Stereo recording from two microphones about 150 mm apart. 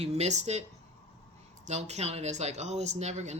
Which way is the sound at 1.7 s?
45° right (ahead or behind).